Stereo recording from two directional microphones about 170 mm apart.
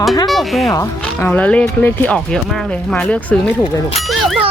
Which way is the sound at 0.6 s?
20° left (ahead or behind).